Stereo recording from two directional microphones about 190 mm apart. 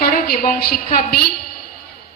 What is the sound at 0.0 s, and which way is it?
A woman's voice, 50° left (ahead or behind).